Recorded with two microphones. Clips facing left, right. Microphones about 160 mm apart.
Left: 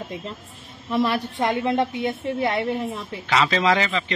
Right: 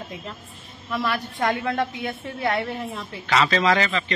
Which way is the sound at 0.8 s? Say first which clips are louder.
Left 4 dB; 30° left (ahead or behind).